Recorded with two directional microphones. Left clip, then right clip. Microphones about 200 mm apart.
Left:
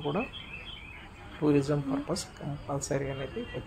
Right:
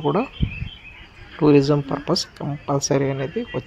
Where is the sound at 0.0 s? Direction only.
40° right (ahead or behind).